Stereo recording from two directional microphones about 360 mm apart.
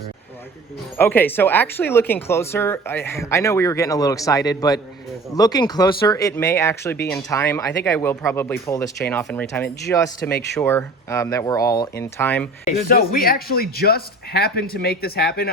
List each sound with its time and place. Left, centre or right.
0.9 s speech: centre
12.9 s speech: left